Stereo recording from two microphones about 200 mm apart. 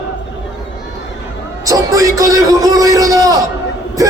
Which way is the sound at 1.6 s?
15° right (ahead or behind).